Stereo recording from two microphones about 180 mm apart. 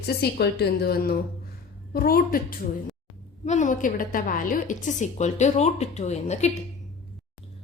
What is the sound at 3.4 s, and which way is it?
A woman's voice, 40° left (ahead or behind).